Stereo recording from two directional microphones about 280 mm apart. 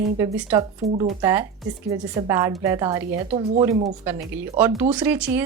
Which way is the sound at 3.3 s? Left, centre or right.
Right.